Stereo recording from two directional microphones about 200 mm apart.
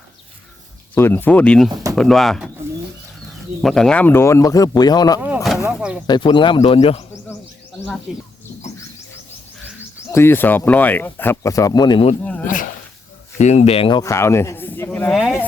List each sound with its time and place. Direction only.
0.9 s speech: 10° left (ahead or behind)
1.7 s speech: 15° right (ahead or behind)
2.0 s speech: centre (ahead or behind)
3.6 s speech: centre (ahead or behind); by 5.2 s 20° left (ahead or behind)
5.2 s a sound: 5° right (ahead or behind)
6.1 s speech: 25° left (ahead or behind)
10.1 s speech: 10° left (ahead or behind)
12.2 s a sound: 5° left (ahead or behind)
13.4 s speech: 35° left (ahead or behind)
14.0 s speech: 15° left (ahead or behind)